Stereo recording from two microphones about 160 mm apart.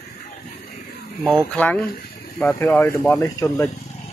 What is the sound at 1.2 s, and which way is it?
Speech, 5° left (ahead or behind).